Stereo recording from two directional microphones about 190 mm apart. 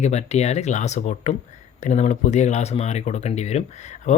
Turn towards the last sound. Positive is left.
turn(degrees=35)  # may be behind; listen again after turning